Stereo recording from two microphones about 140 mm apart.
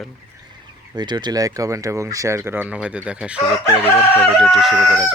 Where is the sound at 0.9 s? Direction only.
30° right (ahead or behind).